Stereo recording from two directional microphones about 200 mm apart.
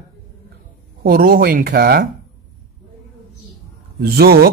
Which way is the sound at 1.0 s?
45° right (ahead or behind).